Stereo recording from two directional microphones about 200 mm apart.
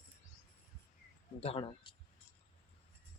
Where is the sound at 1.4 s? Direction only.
30° left (ahead or behind).